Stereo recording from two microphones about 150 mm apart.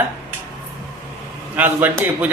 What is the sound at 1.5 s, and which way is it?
Speech, 10° right (ahead or behind).